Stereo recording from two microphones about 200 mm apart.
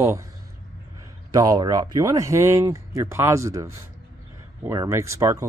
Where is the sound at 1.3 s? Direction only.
20° right (ahead or behind).